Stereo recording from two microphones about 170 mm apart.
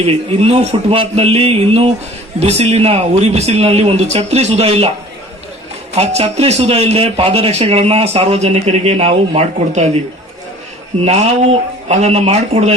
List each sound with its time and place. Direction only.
0.0 s a man's voice: 35° right (ahead or behind)
5.9 s a man's voice: 40° right (ahead or behind)
11.0 s a man's voice: 40° right (ahead or behind)